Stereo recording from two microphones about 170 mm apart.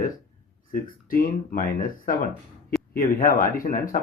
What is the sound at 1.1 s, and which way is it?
Speech, 60° left (ahead or behind).